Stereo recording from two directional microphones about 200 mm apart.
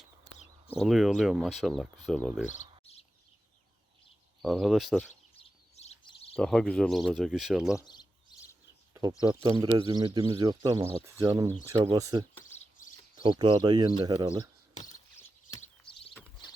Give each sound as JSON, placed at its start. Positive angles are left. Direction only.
{"t": 0.8, "sound": "speech", "side_deg": 0}
{"t": 2.5, "sound": "bird", "side_deg": 30}
{"t": 4.4, "sound": "speech", "side_deg": 0}
{"t": 5.4, "sound": "a sound", "side_deg": 30}
{"t": 6.3, "sound": "speech", "side_deg": 0}
{"t": 7.8, "sound": "bird", "side_deg": 20}
{"t": 8.9, "sound": "a sound", "side_deg": -20}
{"t": 9.4, "sound": "speech", "side_deg": -20}
{"t": 12.5, "sound": "bird", "side_deg": 40}
{"t": 13.2, "sound": "speech", "side_deg": -20}